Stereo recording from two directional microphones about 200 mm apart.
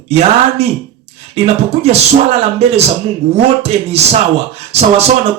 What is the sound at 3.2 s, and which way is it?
Speech, 30° right (ahead or behind).